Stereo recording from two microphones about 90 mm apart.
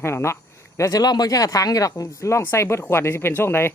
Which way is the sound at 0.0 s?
30° left (ahead or behind).